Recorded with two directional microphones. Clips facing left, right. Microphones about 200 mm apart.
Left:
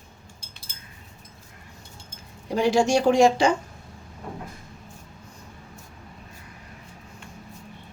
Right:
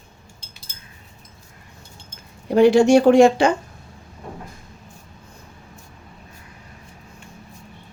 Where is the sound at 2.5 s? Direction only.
60° right (ahead or behind).